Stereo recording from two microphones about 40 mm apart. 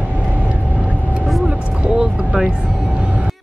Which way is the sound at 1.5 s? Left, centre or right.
Right.